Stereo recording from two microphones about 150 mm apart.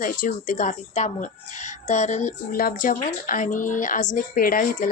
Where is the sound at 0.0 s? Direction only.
65° left (ahead or behind).